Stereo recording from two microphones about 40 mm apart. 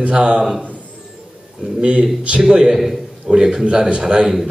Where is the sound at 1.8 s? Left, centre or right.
Right.